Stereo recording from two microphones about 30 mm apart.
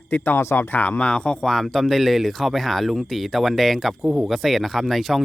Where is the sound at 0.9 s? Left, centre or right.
Left.